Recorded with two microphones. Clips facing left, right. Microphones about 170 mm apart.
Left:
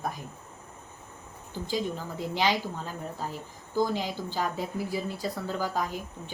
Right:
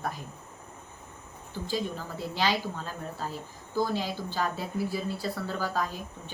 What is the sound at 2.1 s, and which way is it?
Speech, 15° left (ahead or behind).